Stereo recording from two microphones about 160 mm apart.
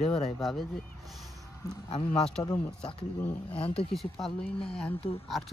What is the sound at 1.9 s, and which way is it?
Speech, 35° left (ahead or behind).